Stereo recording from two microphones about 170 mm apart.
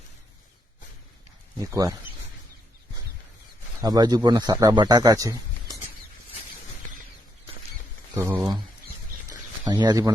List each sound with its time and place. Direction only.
1.5 s a man's voice: 20° right (ahead or behind)
3.8 s a man's voice: 20° right (ahead or behind)
8.1 s speech: 15° right (ahead or behind)
9.6 s a man's voice: 25° right (ahead or behind)